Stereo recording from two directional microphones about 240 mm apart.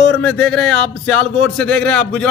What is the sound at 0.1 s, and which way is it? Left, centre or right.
A man's voice, centre.